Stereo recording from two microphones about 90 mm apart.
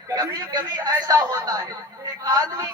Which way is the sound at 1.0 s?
45° right (ahead or behind).